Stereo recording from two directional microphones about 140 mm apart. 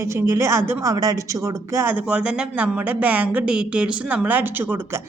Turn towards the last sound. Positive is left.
turn(degrees=-15)  # may be behind; listen again after turning